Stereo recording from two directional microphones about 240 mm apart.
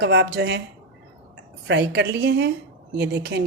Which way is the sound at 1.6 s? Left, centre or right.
Right.